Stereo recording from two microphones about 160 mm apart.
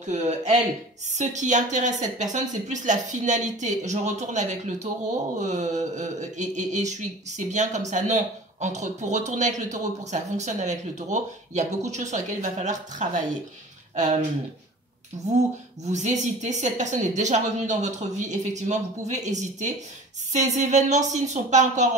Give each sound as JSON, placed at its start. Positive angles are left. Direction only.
{"t": 0.0, "sound": "speech", "side_deg": -45}
{"t": 15.8, "sound": "speech", "side_deg": -45}